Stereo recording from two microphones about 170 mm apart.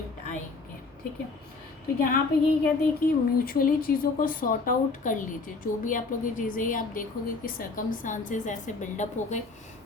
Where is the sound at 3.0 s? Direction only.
55° left (ahead or behind).